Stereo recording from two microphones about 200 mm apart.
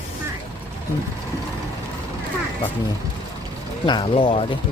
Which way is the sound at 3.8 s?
25° left (ahead or behind).